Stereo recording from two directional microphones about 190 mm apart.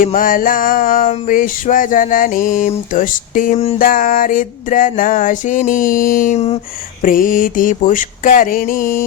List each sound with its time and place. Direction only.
0.0 s music: 45° left (ahead or behind)
7.0 s music: 45° left (ahead or behind)